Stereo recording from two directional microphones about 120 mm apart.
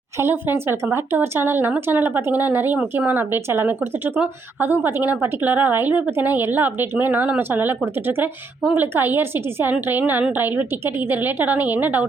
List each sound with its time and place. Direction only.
0.2 s speech: 20° right (ahead or behind)